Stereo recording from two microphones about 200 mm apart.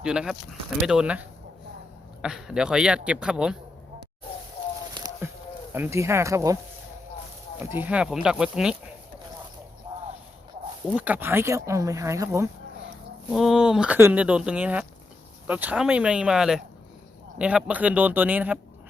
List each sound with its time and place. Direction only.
0.0 s speech: 5° right (ahead or behind)
4.9 s a sound: 20° right (ahead or behind)
5.7 s speech: 10° right (ahead or behind)
7.6 s speech: 10° right (ahead or behind)
9.9 s a sound: 25° right (ahead or behind)
10.8 s speech: 5° right (ahead or behind)
13.3 s speech: centre (ahead or behind)